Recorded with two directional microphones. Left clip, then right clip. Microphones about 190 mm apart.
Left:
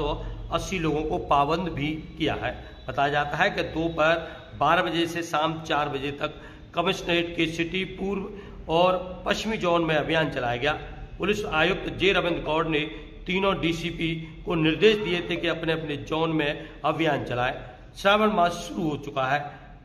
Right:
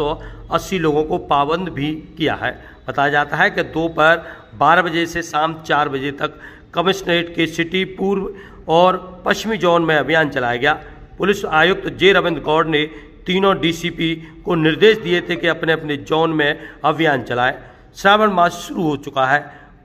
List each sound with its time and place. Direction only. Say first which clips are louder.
0.0 s a man's voice: right 8 dB; 35° right (ahead or behind)